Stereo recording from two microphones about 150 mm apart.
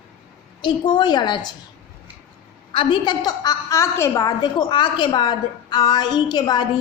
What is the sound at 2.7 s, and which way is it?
A woman's voice, 30° left (ahead or behind).